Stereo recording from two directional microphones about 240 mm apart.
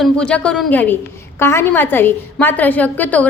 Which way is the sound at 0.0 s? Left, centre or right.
Centre.